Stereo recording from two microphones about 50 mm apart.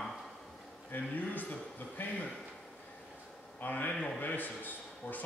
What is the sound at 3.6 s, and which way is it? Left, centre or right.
A man's voice, left.